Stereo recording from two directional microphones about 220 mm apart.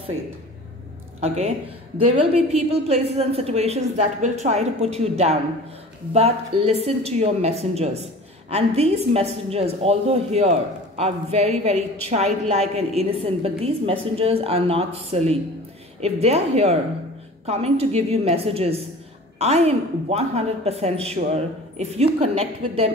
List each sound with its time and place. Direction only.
1.2 s a woman's voice: 30° right (ahead or behind)